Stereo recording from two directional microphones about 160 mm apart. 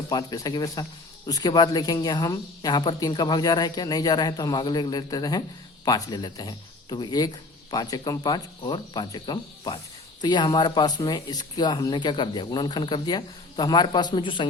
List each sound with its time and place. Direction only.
0.1 s speech: 25° left (ahead or behind)